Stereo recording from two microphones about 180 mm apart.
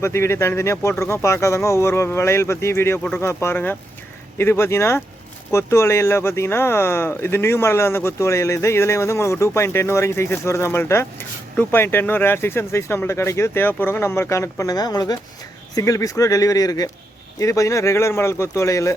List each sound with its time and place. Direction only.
0.0 s speech: 15° left (ahead or behind)